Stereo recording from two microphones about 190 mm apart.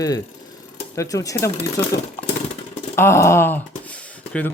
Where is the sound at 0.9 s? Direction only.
20° left (ahead or behind).